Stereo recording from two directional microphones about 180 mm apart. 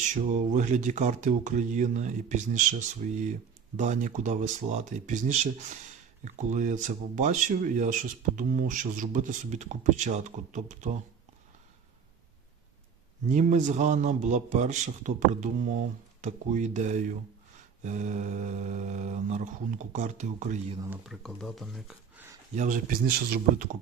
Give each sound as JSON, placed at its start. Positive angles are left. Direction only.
{"t": 0.1, "sound": "speech", "side_deg": -45}
{"t": 3.8, "sound": "mantra", "side_deg": -40}
{"t": 6.2, "sound": "speech", "side_deg": -45}
{"t": 13.2, "sound": "mantra", "side_deg": -45}
{"t": 21.1, "sound": "speech", "side_deg": 0}
{"t": 22.5, "sound": "speech", "side_deg": -45}